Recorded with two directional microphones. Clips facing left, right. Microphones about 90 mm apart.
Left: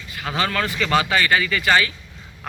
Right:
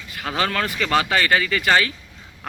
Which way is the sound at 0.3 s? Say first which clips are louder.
Even; 40° right (ahead or behind).